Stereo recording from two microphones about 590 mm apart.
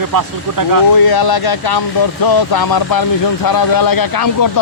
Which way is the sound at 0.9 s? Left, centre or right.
Left.